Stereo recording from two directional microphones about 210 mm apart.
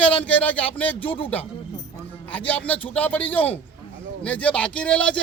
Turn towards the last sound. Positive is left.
turn(degrees=5)  # may be behind; listen again after turning